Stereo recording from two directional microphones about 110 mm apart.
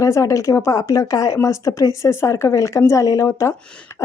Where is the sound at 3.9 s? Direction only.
30° left (ahead or behind).